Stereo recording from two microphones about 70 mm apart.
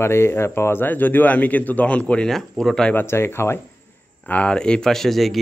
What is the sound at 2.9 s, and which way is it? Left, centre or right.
Speech, left.